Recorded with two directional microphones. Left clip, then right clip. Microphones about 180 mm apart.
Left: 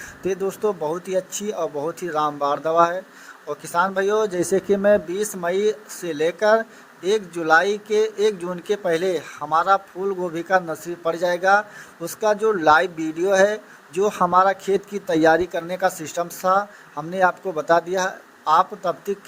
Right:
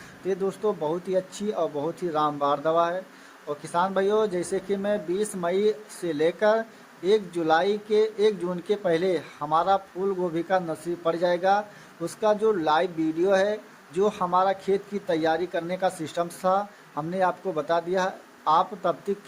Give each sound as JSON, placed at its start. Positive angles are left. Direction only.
{"t": 0.3, "sound": "speech", "side_deg": 40}